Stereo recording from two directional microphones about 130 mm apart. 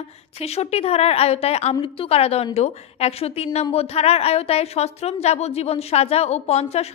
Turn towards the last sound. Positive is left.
turn(degrees=55)  # may be behind; listen again after turning